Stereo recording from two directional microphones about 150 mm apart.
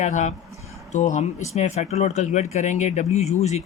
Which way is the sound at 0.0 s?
55° left (ahead or behind).